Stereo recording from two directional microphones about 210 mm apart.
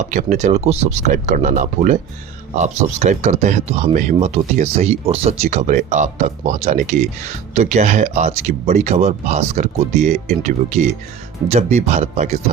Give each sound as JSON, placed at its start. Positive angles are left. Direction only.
{"t": 0.0, "sound": "speech", "side_deg": -35}